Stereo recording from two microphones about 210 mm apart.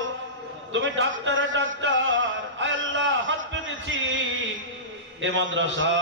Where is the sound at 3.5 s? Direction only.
65° right (ahead or behind).